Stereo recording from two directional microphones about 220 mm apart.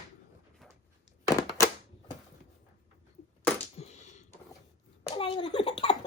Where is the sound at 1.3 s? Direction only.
15° left (ahead or behind).